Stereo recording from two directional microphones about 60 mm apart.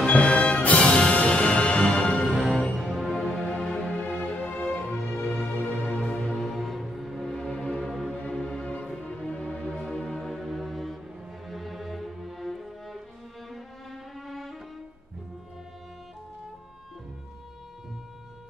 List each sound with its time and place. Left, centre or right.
0.0 s music: left
2.3 s music: centre
3.7 s music: centre
6.2 s music: centre
8.1 s music: centre
14.1 s music: centre